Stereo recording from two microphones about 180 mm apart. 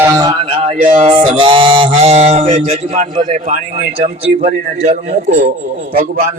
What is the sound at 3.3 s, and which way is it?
Speech, 45° right (ahead or behind).